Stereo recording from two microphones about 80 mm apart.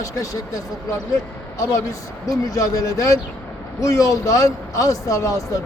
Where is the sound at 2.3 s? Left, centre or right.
Left.